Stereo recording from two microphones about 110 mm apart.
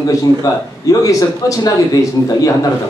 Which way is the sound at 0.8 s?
30° left (ahead or behind).